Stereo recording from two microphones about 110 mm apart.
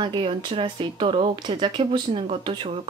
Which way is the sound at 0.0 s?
50° right (ahead or behind).